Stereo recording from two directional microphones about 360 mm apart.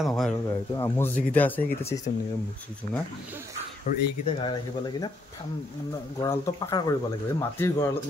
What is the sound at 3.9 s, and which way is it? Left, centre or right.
Speech, left.